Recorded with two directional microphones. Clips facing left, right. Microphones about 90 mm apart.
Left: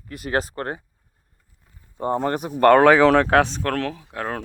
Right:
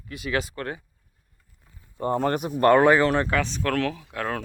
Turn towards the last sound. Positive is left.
turn(degrees=25)  # may be behind; listen again after turning